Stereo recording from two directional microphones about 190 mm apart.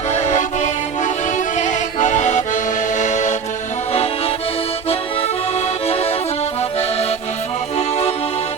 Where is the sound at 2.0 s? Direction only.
40° left (ahead or behind).